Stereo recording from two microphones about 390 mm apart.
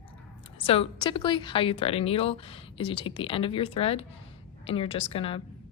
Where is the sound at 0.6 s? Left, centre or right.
Centre.